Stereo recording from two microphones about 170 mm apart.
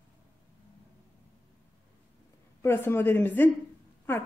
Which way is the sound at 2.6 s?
10° left (ahead or behind).